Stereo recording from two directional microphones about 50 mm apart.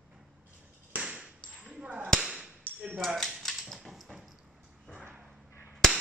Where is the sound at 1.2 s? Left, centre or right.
Centre.